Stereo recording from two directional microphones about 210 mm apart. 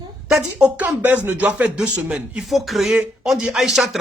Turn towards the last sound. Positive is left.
turn(degrees=0)  # may be behind; listen again after turning